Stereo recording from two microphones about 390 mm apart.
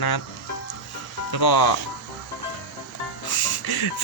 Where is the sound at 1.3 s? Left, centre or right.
Left.